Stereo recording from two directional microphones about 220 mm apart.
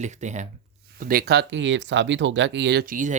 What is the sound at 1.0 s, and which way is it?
Speech, 45° right (ahead or behind).